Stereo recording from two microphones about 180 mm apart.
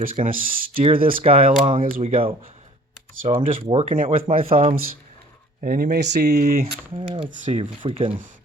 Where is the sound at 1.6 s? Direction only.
50° right (ahead or behind).